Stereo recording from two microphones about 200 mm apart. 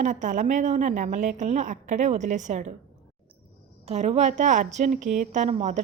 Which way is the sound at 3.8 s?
30° right (ahead or behind).